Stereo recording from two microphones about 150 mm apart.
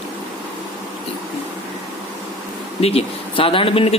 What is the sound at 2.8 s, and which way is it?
A man's voice, 40° left (ahead or behind).